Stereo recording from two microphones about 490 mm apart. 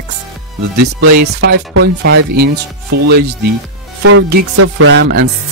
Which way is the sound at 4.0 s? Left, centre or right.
Right.